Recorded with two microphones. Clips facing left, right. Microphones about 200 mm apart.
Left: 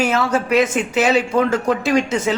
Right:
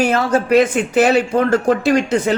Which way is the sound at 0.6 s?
55° right (ahead or behind).